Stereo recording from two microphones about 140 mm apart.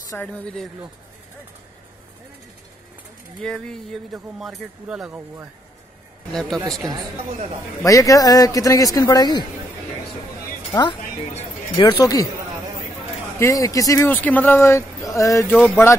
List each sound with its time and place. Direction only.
0.3 s speech: 5° left (ahead or behind)
3.4 s speech: 5° left (ahead or behind)
6.8 s speech: 25° right (ahead or behind)
7.8 s speech: 25° left (ahead or behind)
10.7 s speech: 35° left (ahead or behind)
13.4 s speech: 25° left (ahead or behind)